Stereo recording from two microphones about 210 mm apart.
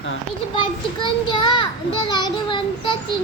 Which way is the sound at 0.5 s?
20° left (ahead or behind).